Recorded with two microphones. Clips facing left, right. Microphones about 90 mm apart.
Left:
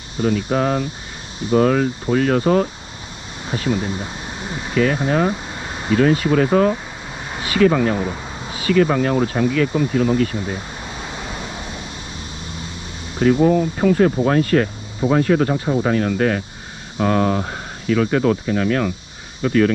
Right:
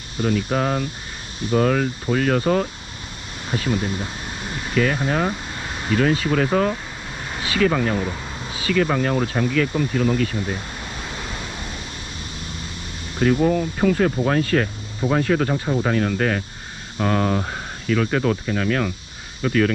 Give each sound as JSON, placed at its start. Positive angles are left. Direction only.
{"t": 0.2, "sound": "speech", "side_deg": 35}
{"t": 4.7, "sound": "speech", "side_deg": 35}
{"t": 7.4, "sound": "vehicle", "side_deg": 30}
{"t": 8.6, "sound": "speech", "side_deg": 35}
{"t": 13.2, "sound": "speech", "side_deg": 30}